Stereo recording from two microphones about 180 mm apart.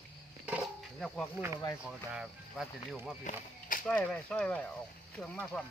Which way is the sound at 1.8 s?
5° right (ahead or behind).